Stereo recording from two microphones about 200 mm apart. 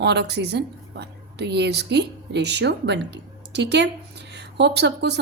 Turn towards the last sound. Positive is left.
turn(degrees=-60)  # may be behind; listen again after turning